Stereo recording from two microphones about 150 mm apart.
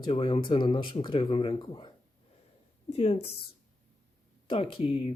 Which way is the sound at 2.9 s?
40° left (ahead or behind).